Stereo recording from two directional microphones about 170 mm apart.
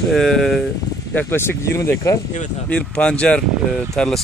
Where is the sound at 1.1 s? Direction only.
10° left (ahead or behind).